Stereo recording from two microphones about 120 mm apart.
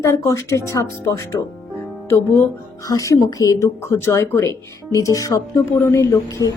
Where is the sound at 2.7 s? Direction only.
30° left (ahead or behind).